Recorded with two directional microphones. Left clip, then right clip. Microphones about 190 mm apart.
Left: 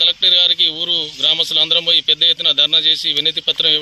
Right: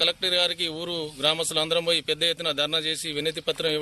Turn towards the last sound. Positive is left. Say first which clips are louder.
# left 11 dB
turn(degrees=-15)  # may be behind; listen again after turning